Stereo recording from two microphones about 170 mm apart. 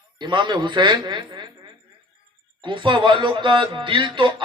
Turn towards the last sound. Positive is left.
turn(degrees=-30)  # may be behind; listen again after turning